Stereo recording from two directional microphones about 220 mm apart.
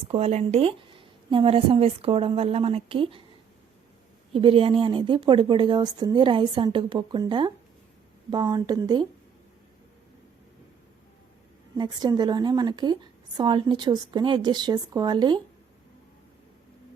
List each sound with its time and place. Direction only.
0.1 s a woman's voice: 30° right (ahead or behind)
4.3 s a woman's voice: 25° right (ahead or behind)
11.8 s a woman's voice: 20° right (ahead or behind)